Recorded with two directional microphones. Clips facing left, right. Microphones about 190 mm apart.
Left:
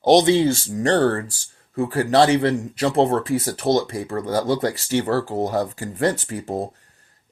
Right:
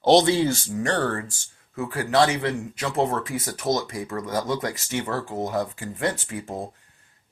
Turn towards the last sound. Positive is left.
turn(degrees=35)  # may be behind; listen again after turning